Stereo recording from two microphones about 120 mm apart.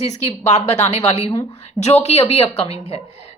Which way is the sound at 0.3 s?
65° left (ahead or behind).